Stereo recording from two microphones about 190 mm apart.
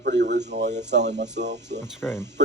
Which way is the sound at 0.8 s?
65° right (ahead or behind).